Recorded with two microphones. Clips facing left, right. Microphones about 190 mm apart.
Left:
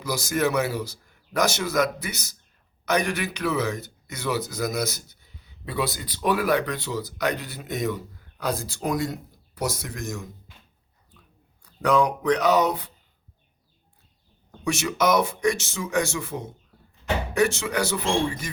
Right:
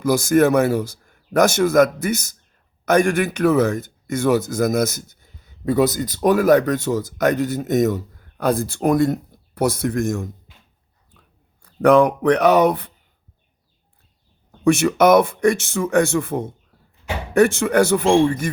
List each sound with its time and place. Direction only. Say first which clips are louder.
0.0 s speech: right 9 dB; 50° right (ahead or behind)
11.6 s speech: right 8 dB; 55° right (ahead or behind)
14.6 s speech: right 9 dB; 55° right (ahead or behind)